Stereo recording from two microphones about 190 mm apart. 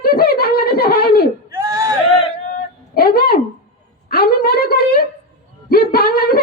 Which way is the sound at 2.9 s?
55° left (ahead or behind).